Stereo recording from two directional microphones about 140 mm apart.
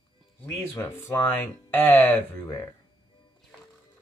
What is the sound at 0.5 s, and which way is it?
Speech, 20° left (ahead or behind).